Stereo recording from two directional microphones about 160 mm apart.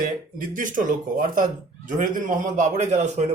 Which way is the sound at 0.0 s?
55° right (ahead or behind).